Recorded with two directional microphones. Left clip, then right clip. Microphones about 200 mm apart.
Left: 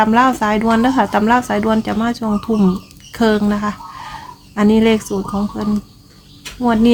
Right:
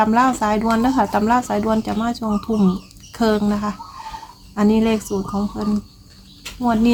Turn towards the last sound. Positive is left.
turn(degrees=10)  # may be behind; listen again after turning